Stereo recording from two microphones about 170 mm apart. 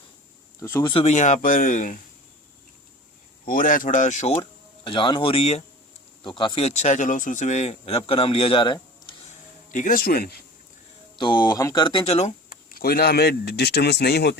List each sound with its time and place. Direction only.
0.6 s speech: 20° left (ahead or behind)
0.9 s speech: 40° left (ahead or behind)
3.4 s speech: 55° left (ahead or behind)
4.8 s speech: 30° left (ahead or behind)
9.7 s speech: 50° left (ahead or behind)
11.2 s speech: 25° left (ahead or behind)
12.5 s speech: 60° left (ahead or behind); by 14.3 s 75° left (ahead or behind)